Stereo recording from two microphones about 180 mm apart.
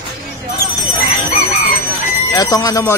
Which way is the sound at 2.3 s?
20° left (ahead or behind).